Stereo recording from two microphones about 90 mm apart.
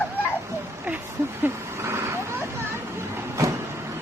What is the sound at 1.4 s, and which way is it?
Vehicle, 30° right (ahead or behind).